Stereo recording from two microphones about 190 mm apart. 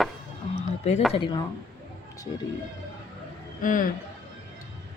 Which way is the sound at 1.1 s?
25° left (ahead or behind).